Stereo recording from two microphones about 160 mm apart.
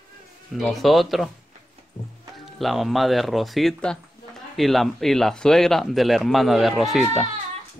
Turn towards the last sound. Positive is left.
turn(degrees=0)  # may be behind; listen again after turning